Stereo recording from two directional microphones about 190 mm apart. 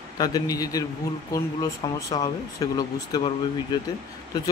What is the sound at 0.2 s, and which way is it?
Speech, 20° left (ahead or behind).